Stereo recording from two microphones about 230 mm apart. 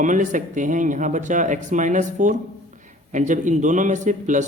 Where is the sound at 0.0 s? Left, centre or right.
Right.